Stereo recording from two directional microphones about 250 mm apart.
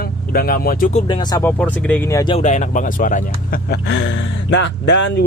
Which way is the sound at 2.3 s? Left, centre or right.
Left.